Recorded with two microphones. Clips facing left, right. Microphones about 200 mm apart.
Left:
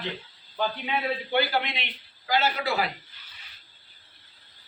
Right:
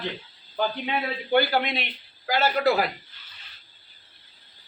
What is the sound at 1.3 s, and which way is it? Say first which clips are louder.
A man's voice: right 7 dB; 45° right (ahead or behind).